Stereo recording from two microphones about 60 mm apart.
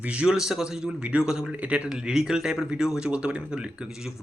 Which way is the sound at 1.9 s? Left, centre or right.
Centre.